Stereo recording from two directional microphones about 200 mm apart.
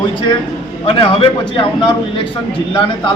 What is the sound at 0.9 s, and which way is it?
A man's voice, 25° left (ahead or behind).